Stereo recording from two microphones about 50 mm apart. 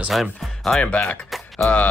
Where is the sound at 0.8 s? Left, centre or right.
Left.